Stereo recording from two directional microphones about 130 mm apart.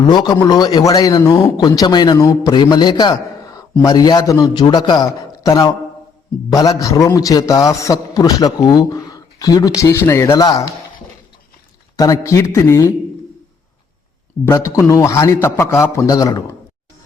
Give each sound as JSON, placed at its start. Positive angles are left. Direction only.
{"t": 0.0, "sound": "a man's voice", "side_deg": 35}
{"t": 11.9, "sound": "a man's voice", "side_deg": 25}
{"t": 14.4, "sound": "a man's voice", "side_deg": 25}